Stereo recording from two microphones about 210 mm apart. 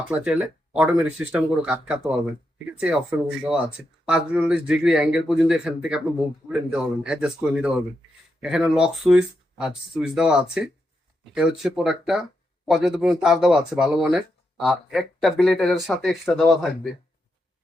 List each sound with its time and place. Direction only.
0.1 s speech: 5° right (ahead or behind)
3.4 s speech: 5° right (ahead or behind)